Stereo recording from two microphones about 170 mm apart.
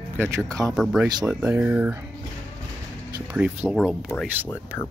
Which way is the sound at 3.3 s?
10° right (ahead or behind).